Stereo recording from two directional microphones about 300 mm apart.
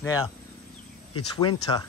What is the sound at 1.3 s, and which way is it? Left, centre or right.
Speech, centre.